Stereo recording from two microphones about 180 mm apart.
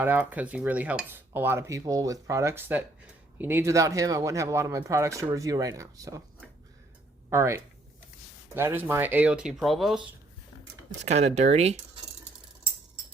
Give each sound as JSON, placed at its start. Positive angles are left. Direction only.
{"t": 0.0, "sound": "speech", "side_deg": -10}
{"t": 7.3, "sound": "speech", "side_deg": -15}
{"t": 11.0, "sound": "speech", "side_deg": -40}